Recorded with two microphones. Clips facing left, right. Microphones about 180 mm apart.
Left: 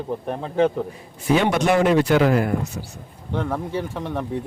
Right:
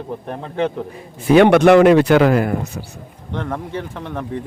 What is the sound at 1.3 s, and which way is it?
Speech, 65° right (ahead or behind).